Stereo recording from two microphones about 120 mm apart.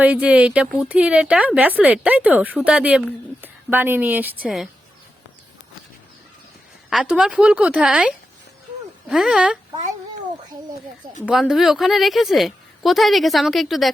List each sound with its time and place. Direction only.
0.0 s a woman's voice: 10° right (ahead or behind)
4.4 s a woman's voice: centre (ahead or behind)
6.9 s a woman's voice: 5° right (ahead or behind)
11.3 s a woman's voice: centre (ahead or behind)